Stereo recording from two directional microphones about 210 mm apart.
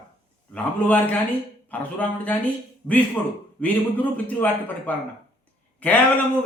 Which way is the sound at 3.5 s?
5° left (ahead or behind).